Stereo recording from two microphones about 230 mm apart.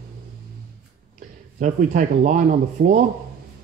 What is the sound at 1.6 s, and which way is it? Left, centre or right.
Speech, right.